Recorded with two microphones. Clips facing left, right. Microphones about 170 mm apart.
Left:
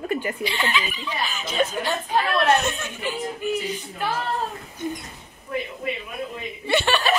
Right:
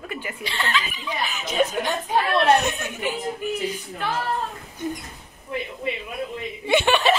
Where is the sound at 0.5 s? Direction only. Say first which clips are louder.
Right 3 dB; 10° left (ahead or behind).